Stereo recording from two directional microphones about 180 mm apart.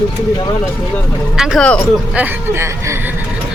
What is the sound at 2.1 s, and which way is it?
Speech, 10° right (ahead or behind).